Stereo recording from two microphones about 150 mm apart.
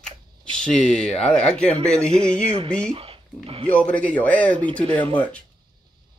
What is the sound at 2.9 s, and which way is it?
Speech, 40° right (ahead or behind).